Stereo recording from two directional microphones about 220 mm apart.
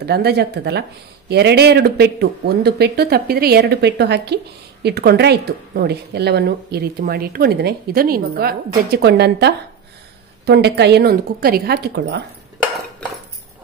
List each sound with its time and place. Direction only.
0.0 s speech: 45° right (ahead or behind)